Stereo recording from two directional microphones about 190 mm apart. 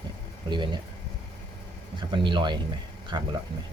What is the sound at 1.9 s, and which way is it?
Speech, 25° right (ahead or behind).